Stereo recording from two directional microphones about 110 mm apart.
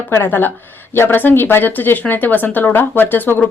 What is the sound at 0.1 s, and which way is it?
Speech, 20° left (ahead or behind).